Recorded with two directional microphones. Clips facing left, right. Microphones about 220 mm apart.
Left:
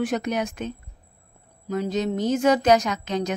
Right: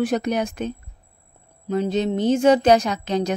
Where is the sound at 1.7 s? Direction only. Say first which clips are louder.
Right 3 dB; 30° right (ahead or behind).